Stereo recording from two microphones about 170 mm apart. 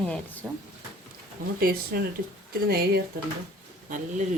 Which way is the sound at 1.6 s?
60° right (ahead or behind).